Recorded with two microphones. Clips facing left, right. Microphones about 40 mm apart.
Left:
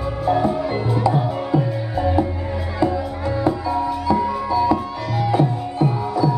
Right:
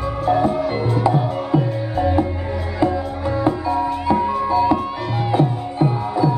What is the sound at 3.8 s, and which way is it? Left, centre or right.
Music, right.